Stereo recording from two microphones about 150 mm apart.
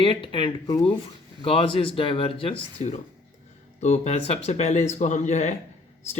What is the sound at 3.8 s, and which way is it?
Speech, 50° left (ahead or behind).